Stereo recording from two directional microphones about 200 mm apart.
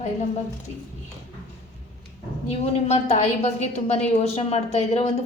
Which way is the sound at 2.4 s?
35° left (ahead or behind).